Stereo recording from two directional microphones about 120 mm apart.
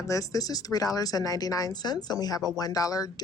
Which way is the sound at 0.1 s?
30° left (ahead or behind).